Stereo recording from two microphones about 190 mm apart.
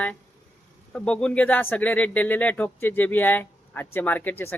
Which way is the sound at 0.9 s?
5° left (ahead or behind).